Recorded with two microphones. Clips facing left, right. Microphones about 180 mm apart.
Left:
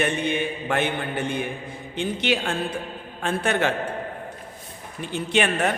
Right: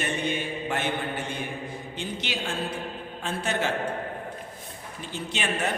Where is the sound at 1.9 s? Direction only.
60° left (ahead or behind).